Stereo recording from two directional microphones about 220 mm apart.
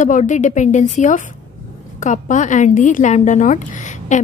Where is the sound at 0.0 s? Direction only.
35° left (ahead or behind).